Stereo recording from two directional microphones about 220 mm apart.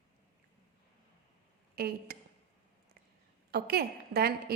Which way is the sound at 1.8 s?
45° right (ahead or behind).